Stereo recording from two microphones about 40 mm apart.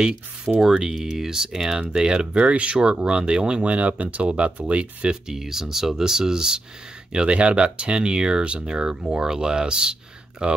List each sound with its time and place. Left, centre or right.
0.6 s speech: centre
1.9 s speech: right
3.6 s speech: right
5.3 s speech: centre
7.1 s speech: right